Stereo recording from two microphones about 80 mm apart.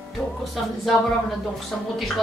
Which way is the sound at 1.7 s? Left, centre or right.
Centre.